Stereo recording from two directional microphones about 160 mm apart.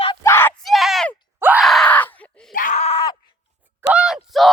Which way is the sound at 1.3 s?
10° right (ahead or behind).